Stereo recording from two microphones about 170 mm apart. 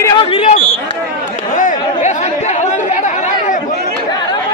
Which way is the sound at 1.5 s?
45° left (ahead or behind).